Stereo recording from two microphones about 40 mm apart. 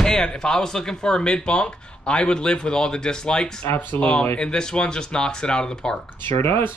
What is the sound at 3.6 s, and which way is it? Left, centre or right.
Speech, left.